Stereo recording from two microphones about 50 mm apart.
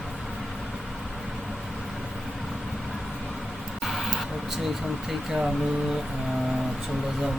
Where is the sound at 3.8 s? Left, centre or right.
Centre.